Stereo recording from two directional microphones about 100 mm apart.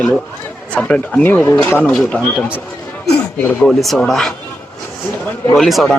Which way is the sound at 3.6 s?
Centre (ahead or behind).